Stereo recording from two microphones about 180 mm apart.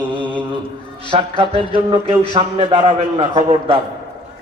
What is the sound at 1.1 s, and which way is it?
Music, 30° right (ahead or behind).